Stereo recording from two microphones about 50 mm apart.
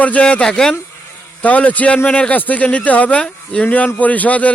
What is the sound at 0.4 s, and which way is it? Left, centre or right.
Speech, centre.